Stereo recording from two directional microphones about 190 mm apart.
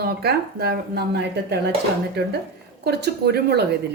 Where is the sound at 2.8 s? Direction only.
60° right (ahead or behind).